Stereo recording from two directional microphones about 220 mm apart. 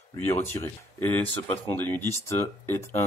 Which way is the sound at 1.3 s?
10° left (ahead or behind).